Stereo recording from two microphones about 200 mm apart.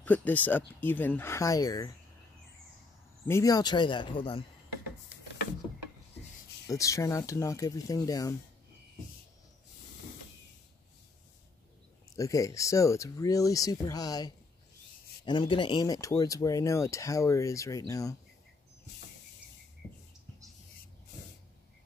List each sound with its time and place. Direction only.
0.0 s speech: 10° left (ahead or behind)
3.3 s speech: 15° left (ahead or behind)
6.7 s speech: 15° left (ahead or behind)
12.2 s speech: 15° left (ahead or behind)